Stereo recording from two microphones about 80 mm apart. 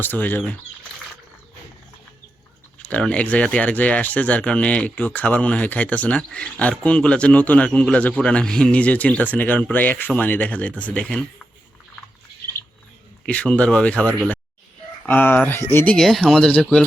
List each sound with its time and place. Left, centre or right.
0.0 s speech: left
2.7 s speech: centre
13.2 s speech: centre
16.0 s speech: centre